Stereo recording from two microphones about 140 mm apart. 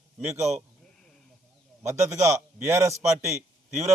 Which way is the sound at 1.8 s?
20° right (ahead or behind).